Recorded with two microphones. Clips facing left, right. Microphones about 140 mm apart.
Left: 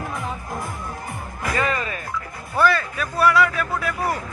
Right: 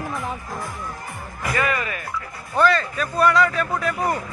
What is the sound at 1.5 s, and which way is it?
Music, 30° left (ahead or behind).